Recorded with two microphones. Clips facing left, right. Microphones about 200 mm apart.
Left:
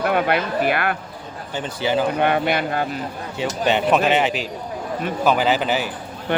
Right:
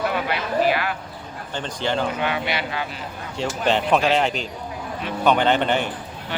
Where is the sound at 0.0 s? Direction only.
55° left (ahead or behind).